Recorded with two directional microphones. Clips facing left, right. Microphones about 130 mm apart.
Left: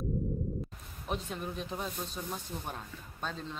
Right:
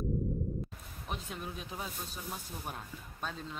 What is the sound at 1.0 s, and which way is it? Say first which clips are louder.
Speech: left 4 dB; centre (ahead or behind).